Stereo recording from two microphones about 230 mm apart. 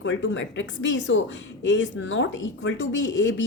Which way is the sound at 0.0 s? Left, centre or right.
Left.